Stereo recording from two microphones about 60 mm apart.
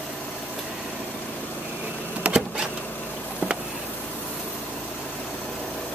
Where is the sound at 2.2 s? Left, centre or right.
Right.